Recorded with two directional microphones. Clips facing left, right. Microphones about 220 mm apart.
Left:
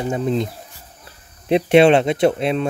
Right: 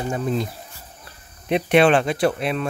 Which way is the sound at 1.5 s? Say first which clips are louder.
Left 4 dB; 30° left (ahead or behind).